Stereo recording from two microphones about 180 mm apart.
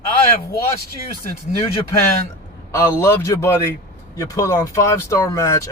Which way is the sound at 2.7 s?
15° left (ahead or behind).